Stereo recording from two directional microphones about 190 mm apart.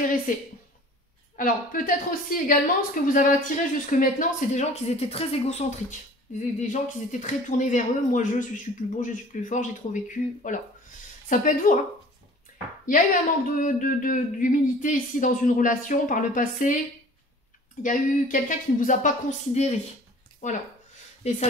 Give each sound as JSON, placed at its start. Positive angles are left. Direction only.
{"t": 1.3, "sound": "a woman's voice", "side_deg": 45}
{"t": 12.8, "sound": "a woman's voice", "side_deg": 45}
{"t": 17.8, "sound": "a woman's voice", "side_deg": 45}